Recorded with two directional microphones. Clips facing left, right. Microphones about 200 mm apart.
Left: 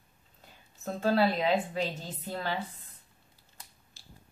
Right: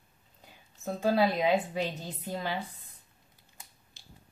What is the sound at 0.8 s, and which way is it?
Speech, 15° right (ahead or behind).